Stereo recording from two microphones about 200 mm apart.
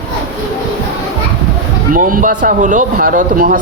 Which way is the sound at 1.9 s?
40° right (ahead or behind).